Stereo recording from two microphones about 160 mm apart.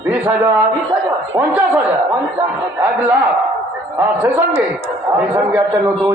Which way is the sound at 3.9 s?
10° right (ahead or behind).